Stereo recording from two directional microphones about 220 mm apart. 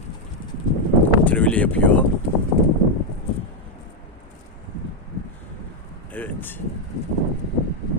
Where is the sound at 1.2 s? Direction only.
5° left (ahead or behind).